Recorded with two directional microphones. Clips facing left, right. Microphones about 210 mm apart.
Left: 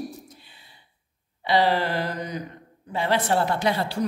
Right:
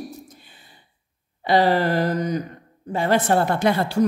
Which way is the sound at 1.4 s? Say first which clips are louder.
Right 3 dB; 45° right (ahead or behind).